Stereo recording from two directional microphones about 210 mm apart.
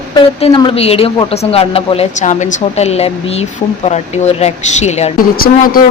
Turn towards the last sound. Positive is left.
turn(degrees=45)  # may be behind; listen again after turning